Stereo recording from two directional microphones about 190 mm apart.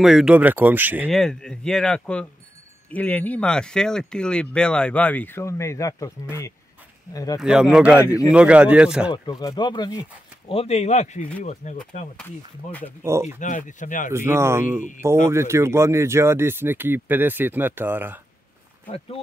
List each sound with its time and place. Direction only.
0.0 s speech: centre (ahead or behind)
1.1 s speech: centre (ahead or behind)
7.3 s speech: 5° right (ahead or behind)
9.1 s speech: 20° left (ahead or behind); by 11.8 s 40° left (ahead or behind)
13.0 s speech: 15° right (ahead or behind)
13.4 s speech: 40° left (ahead or behind)
14.1 s speech: 15° right (ahead or behind)